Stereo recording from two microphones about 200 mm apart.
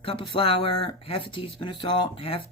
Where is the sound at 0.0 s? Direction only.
25° left (ahead or behind).